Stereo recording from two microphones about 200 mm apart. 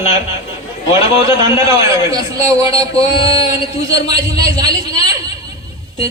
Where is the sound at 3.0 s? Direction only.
30° left (ahead or behind).